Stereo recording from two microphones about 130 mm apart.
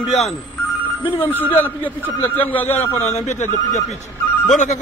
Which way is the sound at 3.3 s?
70° left (ahead or behind).